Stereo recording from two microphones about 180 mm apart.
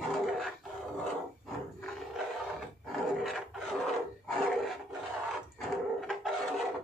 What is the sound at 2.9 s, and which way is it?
Roar, centre (ahead or behind).